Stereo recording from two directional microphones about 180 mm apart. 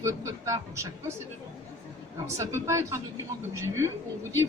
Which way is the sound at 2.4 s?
15° right (ahead or behind).